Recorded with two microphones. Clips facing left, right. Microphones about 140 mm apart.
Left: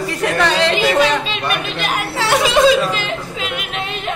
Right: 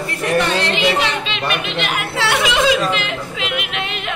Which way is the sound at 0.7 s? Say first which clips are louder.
Left 3 dB; 40° left (ahead or behind).